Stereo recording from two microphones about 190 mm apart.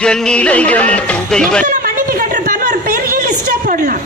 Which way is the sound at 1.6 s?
45° right (ahead or behind).